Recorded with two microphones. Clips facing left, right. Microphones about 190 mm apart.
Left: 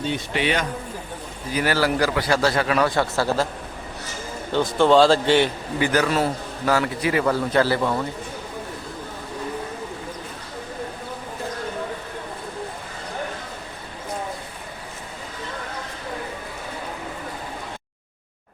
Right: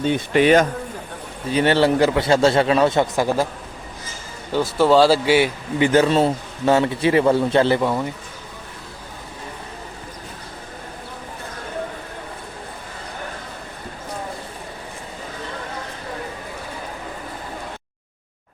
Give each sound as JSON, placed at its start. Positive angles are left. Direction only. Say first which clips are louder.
{"t": 0.1, "sound": "speech", "louder": "right 10 dB", "side_deg": -45}
{"t": 1.5, "sound": "a man's voice", "louder": "right 5 dB", "side_deg": -25}
{"t": 4.5, "sound": "speech", "louder": "right 1 dB", "side_deg": -5}
{"t": 5.8, "sound": "a man's voice", "louder": "right 5 dB", "side_deg": -25}